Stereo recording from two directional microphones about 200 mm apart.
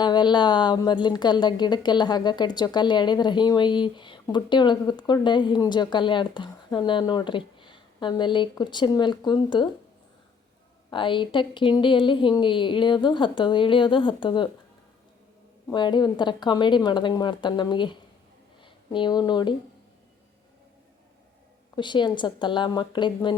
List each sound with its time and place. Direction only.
0.0 s a woman's voice: 20° left (ahead or behind)
10.9 s a woman's voice: 25° left (ahead or behind)
15.7 s a woman's voice: 20° left (ahead or behind)
21.8 s a woman's voice: 25° left (ahead or behind)